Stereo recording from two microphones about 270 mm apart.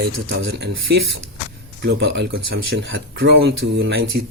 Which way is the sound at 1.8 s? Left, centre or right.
Right.